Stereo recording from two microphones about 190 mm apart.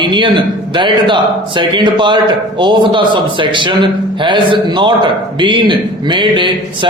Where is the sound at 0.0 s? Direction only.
25° right (ahead or behind).